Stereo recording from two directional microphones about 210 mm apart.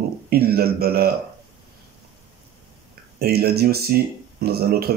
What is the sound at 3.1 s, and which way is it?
Speech, 50° right (ahead or behind).